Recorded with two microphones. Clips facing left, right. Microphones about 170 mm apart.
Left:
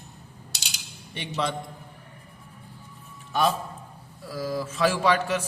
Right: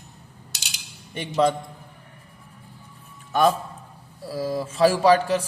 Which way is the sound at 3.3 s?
50° right (ahead or behind).